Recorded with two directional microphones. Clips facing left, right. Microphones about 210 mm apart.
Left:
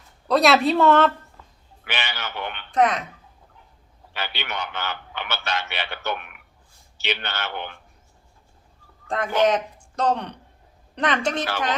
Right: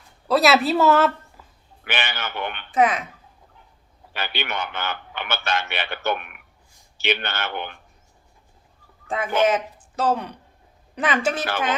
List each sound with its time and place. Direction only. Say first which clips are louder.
0.3 s speech: even; 5° right (ahead or behind)
1.8 s a man's voice: right 2 dB; 50° right (ahead or behind)
2.7 s speech: even; 5° right (ahead or behind)
4.1 s a man's voice: right 2 dB; 55° right (ahead or behind)
9.0 s speech: even; 5° right (ahead or behind)